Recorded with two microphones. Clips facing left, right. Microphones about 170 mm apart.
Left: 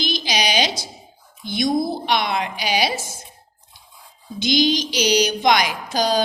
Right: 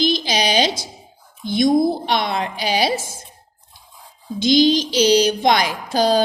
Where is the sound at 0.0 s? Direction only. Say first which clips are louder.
Right 4 dB; 25° right (ahead or behind).